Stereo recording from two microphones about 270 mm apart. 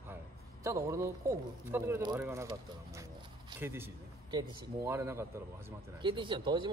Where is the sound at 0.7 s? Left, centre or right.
Centre.